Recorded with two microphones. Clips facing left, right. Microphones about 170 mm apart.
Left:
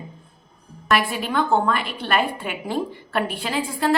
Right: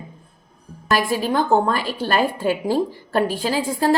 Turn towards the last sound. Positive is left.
turn(degrees=-35)  # may be behind; listen again after turning